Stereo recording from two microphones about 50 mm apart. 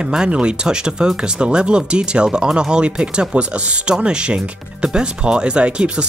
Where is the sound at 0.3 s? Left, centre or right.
Right.